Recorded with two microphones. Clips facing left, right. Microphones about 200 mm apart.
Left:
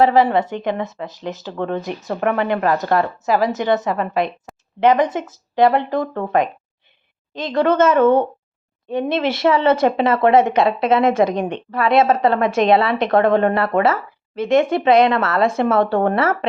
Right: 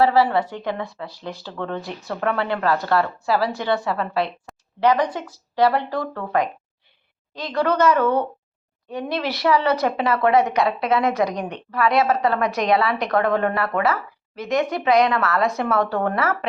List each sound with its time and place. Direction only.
0.0 s speech: 20° left (ahead or behind)
4.5 s a sound: centre (ahead or behind)
4.8 s speech: 20° left (ahead or behind)